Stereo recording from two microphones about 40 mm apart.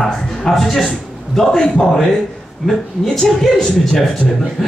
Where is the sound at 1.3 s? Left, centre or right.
Centre.